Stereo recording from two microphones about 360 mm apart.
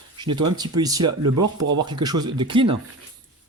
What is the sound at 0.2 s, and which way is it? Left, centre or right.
Speech, centre.